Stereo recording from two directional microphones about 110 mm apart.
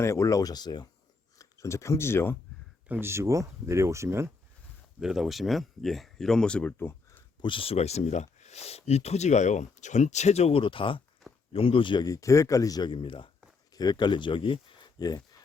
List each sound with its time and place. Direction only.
0.0 s speech: 25° left (ahead or behind)
1.4 s speech: 30° left (ahead or behind)
2.9 s speech: 20° right (ahead or behind)
4.9 s speech: 5° right (ahead or behind); by 7.2 s 20° left (ahead or behind)
7.4 s speech: 55° left (ahead or behind); by 10.6 s 75° left (ahead or behind)
10.6 s speech: 50° left (ahead or behind)
12.0 s speech: 30° left (ahead or behind)
12.9 s speech: 50° left (ahead or behind)
13.7 s speech: 40° left (ahead or behind)
14.9 s speech: 35° left (ahead or behind)